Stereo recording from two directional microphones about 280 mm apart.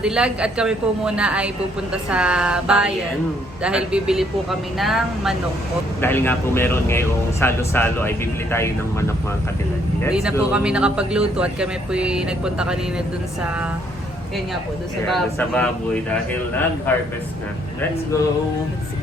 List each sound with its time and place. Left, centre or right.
0.0 s speech: centre
10.1 s speech: centre
15.0 s speech: centre